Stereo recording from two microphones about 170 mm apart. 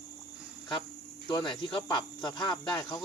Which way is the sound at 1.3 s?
25° left (ahead or behind).